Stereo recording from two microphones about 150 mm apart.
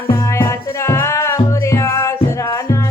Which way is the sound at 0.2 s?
20° left (ahead or behind).